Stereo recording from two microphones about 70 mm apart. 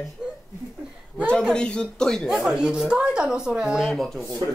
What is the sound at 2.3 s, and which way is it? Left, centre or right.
A woman's voice, centre.